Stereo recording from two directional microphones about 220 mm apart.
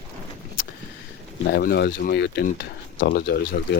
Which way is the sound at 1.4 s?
45° left (ahead or behind).